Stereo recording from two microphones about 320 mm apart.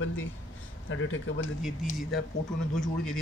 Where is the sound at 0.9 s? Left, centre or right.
Left.